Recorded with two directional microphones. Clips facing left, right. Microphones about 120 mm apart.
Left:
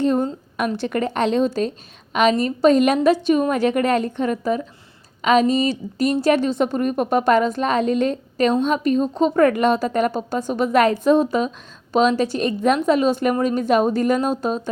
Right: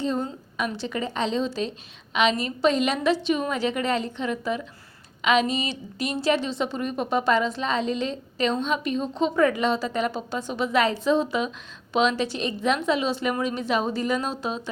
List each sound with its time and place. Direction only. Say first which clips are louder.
0.0 s a woman's voice: left 7 dB; 55° left (ahead or behind)